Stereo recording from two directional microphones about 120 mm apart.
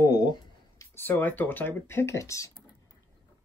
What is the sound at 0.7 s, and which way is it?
Speech, 20° left (ahead or behind).